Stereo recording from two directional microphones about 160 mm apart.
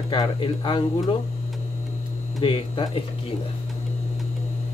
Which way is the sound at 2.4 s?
30° left (ahead or behind).